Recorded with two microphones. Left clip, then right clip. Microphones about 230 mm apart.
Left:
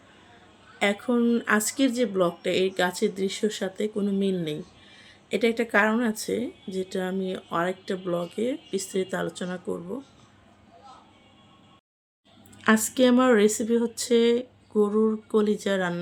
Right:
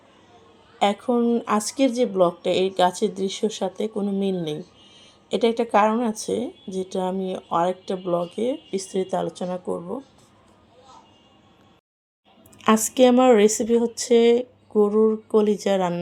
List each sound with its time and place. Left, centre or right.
1.2 s speech: centre
12.6 s a woman's voice: centre
13.9 s speech: left
14.8 s speech: centre
15.4 s speech: left